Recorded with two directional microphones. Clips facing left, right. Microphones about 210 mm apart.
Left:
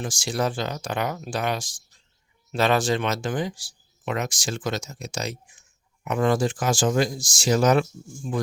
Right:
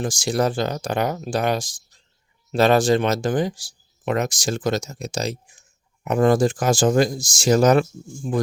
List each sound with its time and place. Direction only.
0.0 s speech: 40° right (ahead or behind)